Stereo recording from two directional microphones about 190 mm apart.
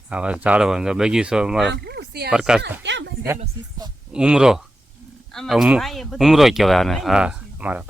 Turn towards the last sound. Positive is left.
turn(degrees=-5)  # may be behind; listen again after turning